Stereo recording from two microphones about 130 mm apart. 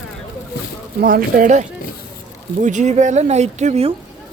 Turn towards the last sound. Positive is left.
turn(degrees=-60)  # may be behind; listen again after turning